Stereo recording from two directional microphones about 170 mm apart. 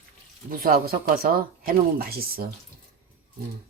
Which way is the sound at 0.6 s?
60° right (ahead or behind).